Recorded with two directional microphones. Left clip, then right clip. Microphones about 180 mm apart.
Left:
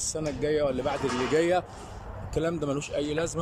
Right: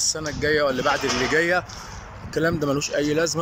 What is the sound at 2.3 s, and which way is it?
Speech, centre (ahead or behind).